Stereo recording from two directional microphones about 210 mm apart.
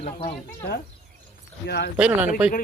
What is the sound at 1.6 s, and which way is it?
Speech, 50° left (ahead or behind).